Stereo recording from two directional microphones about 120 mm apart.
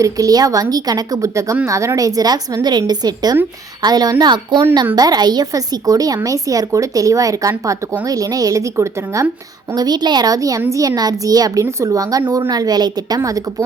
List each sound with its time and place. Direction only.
0.0 s a woman's voice: 30° right (ahead or behind)
9.7 s a woman's voice: 35° right (ahead or behind)